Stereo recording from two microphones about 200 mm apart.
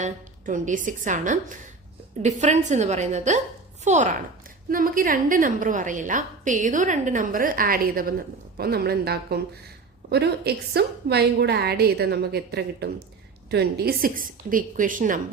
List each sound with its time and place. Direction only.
0.0 s a woman's voice: 40° right (ahead or behind)